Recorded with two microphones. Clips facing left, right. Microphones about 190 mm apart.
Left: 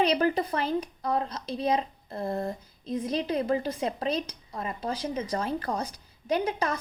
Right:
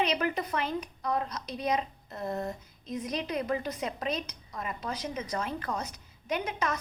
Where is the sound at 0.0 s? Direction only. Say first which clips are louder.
Left 5 dB; 35° left (ahead or behind).